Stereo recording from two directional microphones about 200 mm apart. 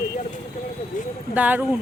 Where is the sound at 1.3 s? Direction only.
10° right (ahead or behind).